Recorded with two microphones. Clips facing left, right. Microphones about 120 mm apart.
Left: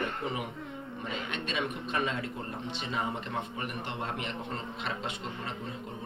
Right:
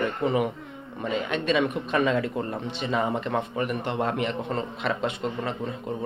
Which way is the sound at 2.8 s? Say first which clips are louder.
Right 9 dB; 65° right (ahead or behind).